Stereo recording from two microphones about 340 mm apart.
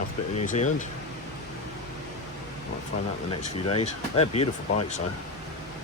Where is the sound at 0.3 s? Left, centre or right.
Centre.